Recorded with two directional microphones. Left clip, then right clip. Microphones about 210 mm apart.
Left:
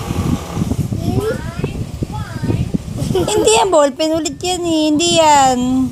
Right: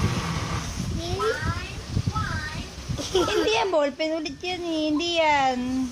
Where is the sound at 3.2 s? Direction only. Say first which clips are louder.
Left 13 dB; 30° left (ahead or behind).